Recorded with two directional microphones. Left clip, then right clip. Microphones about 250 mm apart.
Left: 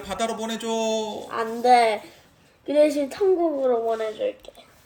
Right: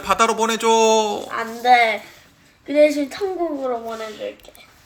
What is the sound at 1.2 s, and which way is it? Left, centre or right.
Speech, left.